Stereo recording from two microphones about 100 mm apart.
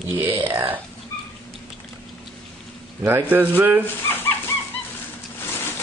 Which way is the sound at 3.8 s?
20° left (ahead or behind).